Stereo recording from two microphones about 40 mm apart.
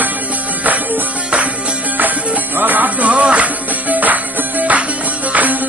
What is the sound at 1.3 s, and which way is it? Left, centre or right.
Music, right.